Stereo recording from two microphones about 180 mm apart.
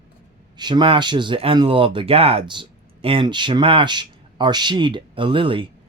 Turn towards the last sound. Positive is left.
turn(degrees=-30)  # may be behind; listen again after turning